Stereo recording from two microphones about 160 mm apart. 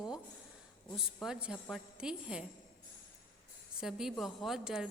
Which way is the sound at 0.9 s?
5° right (ahead or behind).